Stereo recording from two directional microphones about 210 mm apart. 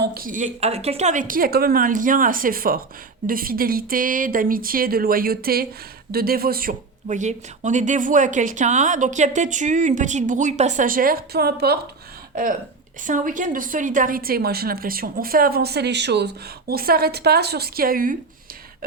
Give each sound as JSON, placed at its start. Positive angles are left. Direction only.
{"t": 0.0, "sound": "a woman's voice", "side_deg": -45}